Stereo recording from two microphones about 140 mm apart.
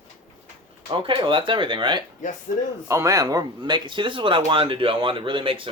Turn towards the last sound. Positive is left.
turn(degrees=-40)  # may be behind; listen again after turning